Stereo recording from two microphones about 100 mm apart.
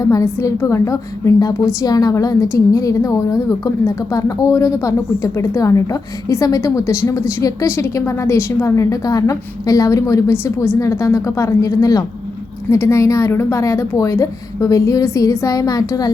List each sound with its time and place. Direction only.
0.1 s speech: 35° left (ahead or behind)